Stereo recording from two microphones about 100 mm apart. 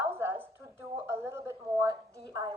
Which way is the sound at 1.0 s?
25° right (ahead or behind).